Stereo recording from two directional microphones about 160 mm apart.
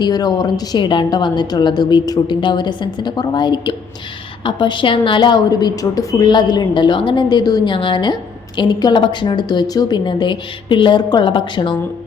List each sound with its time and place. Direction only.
0.0 s a woman's voice: 25° left (ahead or behind)